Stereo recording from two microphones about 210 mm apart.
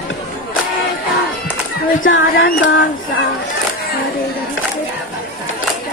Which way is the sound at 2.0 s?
65° left (ahead or behind).